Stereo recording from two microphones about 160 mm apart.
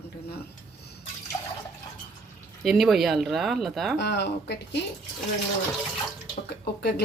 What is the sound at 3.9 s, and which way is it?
Speech, 90° left.